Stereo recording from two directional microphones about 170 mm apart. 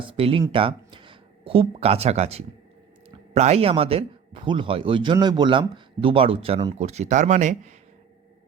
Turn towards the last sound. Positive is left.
turn(degrees=-45)  # may be behind; listen again after turning